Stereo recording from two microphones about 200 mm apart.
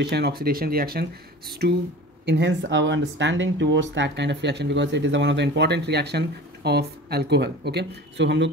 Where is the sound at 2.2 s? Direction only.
60° right (ahead or behind).